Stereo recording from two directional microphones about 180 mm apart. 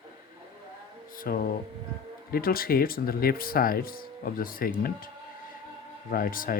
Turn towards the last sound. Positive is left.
turn(degrees=50)  # may be behind; listen again after turning